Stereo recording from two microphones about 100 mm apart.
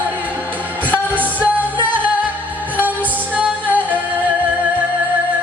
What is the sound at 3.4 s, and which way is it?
Music, 15° right (ahead or behind).